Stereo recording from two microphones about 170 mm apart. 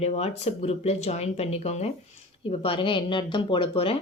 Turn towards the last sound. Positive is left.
turn(degrees=30)  # may be behind; listen again after turning